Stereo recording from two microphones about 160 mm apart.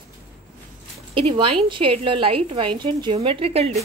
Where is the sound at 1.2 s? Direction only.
35° right (ahead or behind).